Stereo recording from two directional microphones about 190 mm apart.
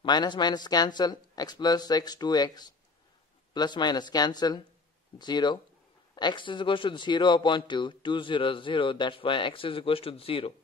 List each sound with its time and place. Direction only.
0.0 s a man's voice: 25° left (ahead or behind)